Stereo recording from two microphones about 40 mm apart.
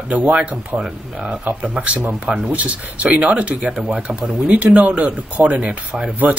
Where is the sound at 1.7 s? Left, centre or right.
Right.